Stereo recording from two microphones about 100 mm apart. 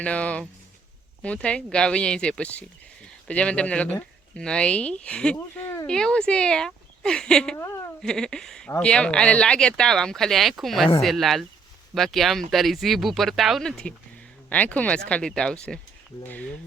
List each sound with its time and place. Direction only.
0.0 s speech: 15° left (ahead or behind)
5.6 s a sound: 25° left (ahead or behind)
5.9 s speech: 10° left (ahead or behind)